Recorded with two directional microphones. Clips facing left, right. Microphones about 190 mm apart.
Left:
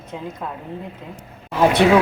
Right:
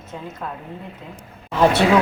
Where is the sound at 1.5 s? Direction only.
10° left (ahead or behind).